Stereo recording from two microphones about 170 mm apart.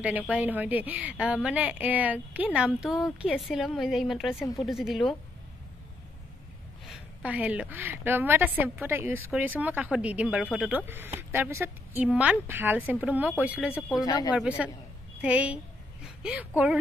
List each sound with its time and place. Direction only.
0.3 s a woman's voice: 10° right (ahead or behind)
6.9 s a woman's voice: 5° right (ahead or behind)
14.0 s speech: 20° left (ahead or behind)
14.6 s a woman's voice: 5° right (ahead or behind)